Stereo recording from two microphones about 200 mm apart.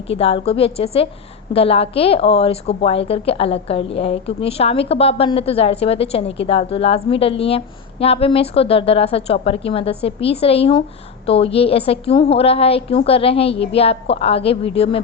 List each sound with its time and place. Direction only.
0.1 s a woman's voice: 30° left (ahead or behind)